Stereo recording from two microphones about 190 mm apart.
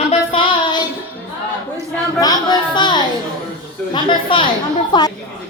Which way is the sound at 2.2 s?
20° left (ahead or behind).